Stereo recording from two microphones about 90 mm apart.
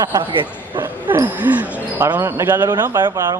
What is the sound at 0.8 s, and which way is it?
Basketball bounce, 25° right (ahead or behind).